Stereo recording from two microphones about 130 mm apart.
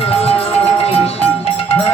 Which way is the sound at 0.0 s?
50° left (ahead or behind).